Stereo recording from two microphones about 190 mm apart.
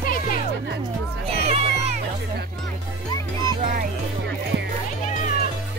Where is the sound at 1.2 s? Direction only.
30° right (ahead or behind).